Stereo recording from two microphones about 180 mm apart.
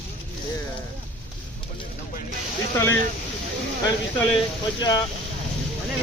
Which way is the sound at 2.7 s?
15° left (ahead or behind).